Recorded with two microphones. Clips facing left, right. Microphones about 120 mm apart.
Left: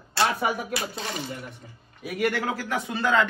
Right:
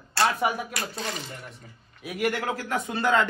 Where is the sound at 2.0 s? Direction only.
Centre (ahead or behind).